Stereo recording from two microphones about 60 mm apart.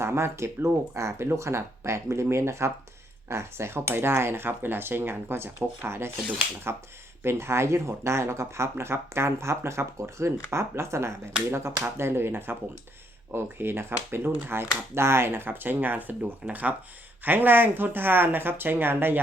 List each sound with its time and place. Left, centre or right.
0.0 s speech: right